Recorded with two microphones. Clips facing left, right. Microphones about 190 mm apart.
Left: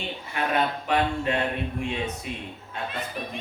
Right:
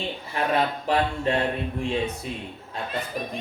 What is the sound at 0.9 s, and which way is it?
Mantra, 35° right (ahead or behind).